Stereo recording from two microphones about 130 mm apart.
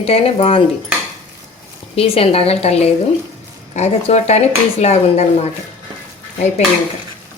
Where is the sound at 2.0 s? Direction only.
50° left (ahead or behind).